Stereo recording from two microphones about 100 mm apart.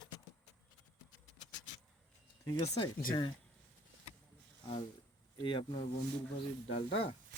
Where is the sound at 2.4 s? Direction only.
40° left (ahead or behind).